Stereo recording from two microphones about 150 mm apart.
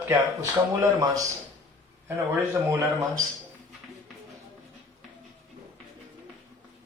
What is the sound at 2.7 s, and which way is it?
Speech, 20° right (ahead or behind).